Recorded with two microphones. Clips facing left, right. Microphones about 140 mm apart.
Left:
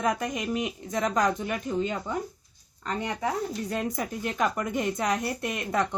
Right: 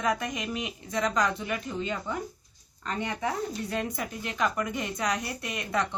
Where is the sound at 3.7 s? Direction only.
40° left (ahead or behind).